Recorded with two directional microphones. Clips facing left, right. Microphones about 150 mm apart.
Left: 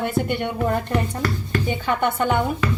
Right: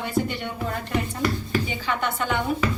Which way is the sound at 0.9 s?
10° right (ahead or behind).